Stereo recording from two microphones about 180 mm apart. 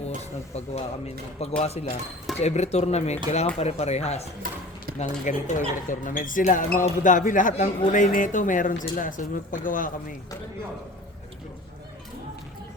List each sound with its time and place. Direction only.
0.5 s speech: 35° left (ahead or behind)